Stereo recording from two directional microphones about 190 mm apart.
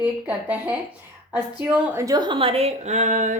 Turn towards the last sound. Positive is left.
turn(degrees=-40)  # may be behind; listen again after turning